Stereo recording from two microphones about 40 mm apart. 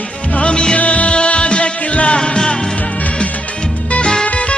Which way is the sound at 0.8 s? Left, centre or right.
Left.